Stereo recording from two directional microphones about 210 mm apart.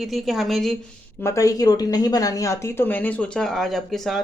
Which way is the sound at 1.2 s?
15° left (ahead or behind).